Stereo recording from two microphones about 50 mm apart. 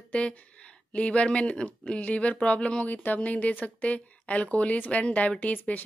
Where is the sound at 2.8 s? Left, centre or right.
Left.